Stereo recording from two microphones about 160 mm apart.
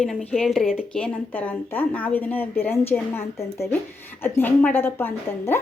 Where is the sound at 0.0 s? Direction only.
5° left (ahead or behind).